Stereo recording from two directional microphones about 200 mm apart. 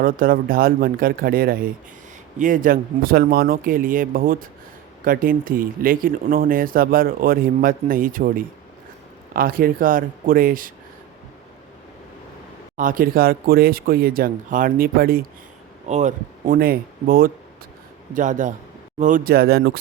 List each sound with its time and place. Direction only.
0.0 s speech: 45° right (ahead or behind)
12.7 s speech: 45° right (ahead or behind)
15.9 s speech: 35° right (ahead or behind); by 19.8 s 50° right (ahead or behind)